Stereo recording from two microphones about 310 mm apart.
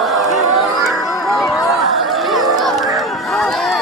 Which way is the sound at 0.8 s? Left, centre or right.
Centre.